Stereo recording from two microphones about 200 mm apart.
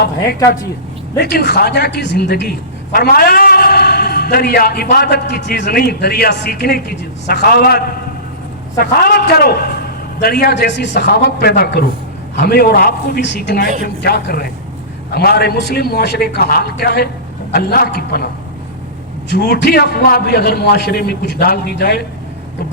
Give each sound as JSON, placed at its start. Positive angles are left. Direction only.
{"t": 1.2, "sound": "a man's voice", "side_deg": 55}
{"t": 8.8, "sound": "a man's voice", "side_deg": 50}
{"t": 19.3, "sound": "a man's voice", "side_deg": 55}